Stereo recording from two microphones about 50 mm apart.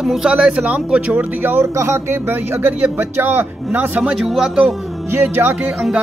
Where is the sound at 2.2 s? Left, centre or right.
Right.